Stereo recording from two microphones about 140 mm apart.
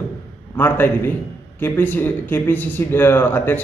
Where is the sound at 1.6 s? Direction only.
15° left (ahead or behind).